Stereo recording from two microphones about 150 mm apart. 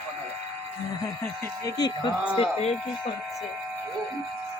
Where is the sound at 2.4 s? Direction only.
45° left (ahead or behind).